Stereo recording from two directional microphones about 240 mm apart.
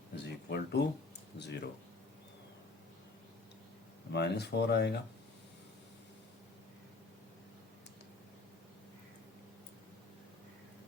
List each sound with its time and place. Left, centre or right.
0.2 s a sound: left
1.4 s speech: left
4.1 s speech: left